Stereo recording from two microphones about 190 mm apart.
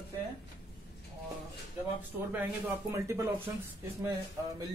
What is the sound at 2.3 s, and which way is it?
Speech, 10° right (ahead or behind).